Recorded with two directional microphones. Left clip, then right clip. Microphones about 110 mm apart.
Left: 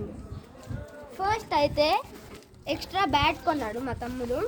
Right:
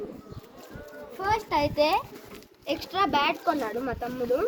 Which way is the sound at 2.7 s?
75° left (ahead or behind).